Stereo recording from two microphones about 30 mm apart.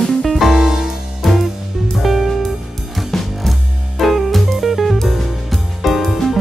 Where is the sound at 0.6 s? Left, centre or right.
Centre.